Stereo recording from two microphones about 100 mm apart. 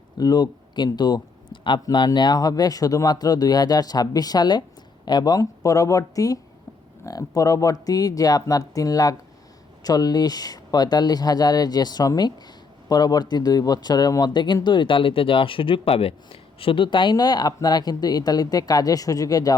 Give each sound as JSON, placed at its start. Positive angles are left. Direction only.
{"t": 0.2, "sound": "speech", "side_deg": 40}
{"t": 1.8, "sound": "speech", "side_deg": 45}